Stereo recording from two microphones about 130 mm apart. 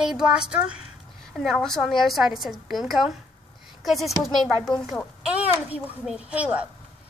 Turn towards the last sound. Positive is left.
turn(degrees=-10)  # may be behind; listen again after turning